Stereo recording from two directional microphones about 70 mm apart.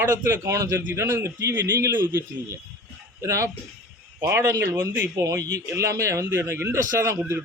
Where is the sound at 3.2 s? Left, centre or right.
Right.